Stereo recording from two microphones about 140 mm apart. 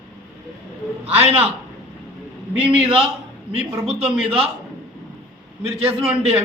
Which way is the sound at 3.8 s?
45° right (ahead or behind).